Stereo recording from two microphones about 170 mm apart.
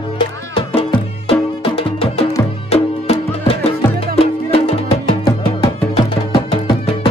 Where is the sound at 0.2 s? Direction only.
30° left (ahead or behind).